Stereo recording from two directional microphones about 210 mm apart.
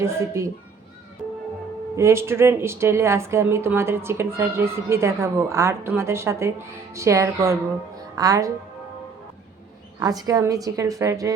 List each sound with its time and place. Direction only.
0.0 s a woman's voice: 15° right (ahead or behind)
2.0 s a woman's voice: 15° right (ahead or behind)
10.0 s a woman's voice: 20° right (ahead or behind)